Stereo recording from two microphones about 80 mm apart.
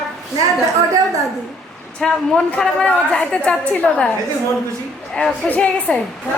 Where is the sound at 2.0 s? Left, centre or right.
Centre.